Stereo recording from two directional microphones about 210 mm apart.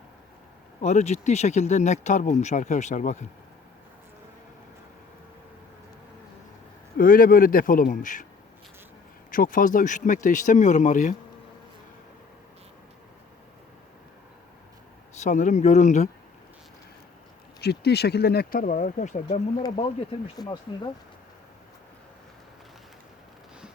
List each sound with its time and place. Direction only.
0.8 s speech: 35° left (ahead or behind)
6.9 s speech: 40° left (ahead or behind)
9.3 s speech: 40° left (ahead or behind)
15.2 s speech: 35° left (ahead or behind)
17.6 s speech: 50° left (ahead or behind); by 20.9 s 20° left (ahead or behind)